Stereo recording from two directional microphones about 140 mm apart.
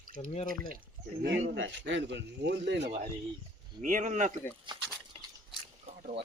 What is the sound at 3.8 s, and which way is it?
Speech, 65° right (ahead or behind).